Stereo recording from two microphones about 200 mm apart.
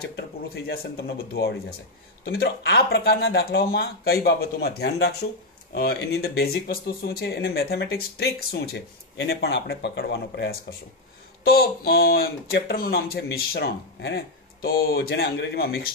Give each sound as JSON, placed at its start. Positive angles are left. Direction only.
{"t": 0.7, "sound": "speech", "side_deg": 50}